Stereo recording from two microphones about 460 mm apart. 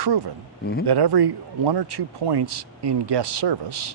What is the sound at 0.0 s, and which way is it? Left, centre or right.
Speech, right.